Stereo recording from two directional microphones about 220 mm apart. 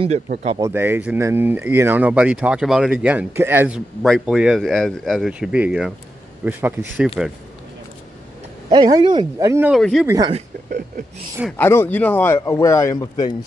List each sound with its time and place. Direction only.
0.0 s speech: 30° right (ahead or behind)
0.6 s speech: 10° right (ahead or behind)
8.6 s speech: 20° right (ahead or behind)
9.8 s speech: centre (ahead or behind)
10.0 s speech: 15° right (ahead or behind)
11.5 s a man's voice: 10° left (ahead or behind)